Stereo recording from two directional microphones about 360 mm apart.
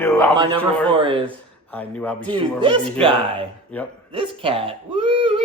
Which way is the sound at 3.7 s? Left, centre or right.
Centre.